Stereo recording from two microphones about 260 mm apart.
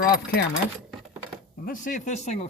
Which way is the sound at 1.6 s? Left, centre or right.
Left.